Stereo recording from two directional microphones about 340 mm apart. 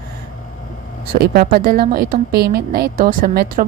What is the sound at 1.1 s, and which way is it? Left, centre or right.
A woman's voice, right.